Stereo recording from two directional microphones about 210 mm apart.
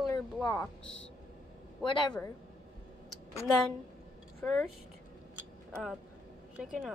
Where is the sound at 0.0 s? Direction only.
10° left (ahead or behind).